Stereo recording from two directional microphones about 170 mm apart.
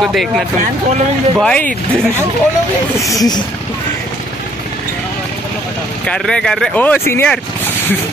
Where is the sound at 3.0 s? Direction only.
20° left (ahead or behind).